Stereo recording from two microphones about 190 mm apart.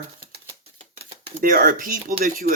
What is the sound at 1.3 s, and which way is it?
Speech, 50° right (ahead or behind).